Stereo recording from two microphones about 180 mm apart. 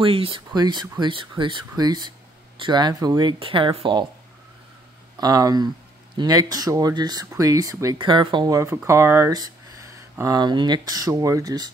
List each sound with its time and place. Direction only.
0.0 s speech: 30° right (ahead or behind)
5.2 s speech: 20° right (ahead or behind)